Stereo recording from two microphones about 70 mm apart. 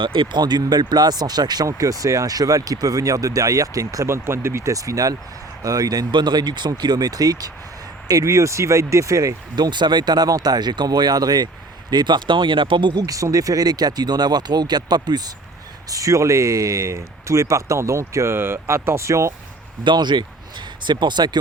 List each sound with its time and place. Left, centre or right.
0.3 s speech: right
1.6 s speech: right
9.6 s speech: right
11.9 s speech: right
12.8 s speech: right
13.1 s speech: right
15.9 s speech: right
20.0 s speech: right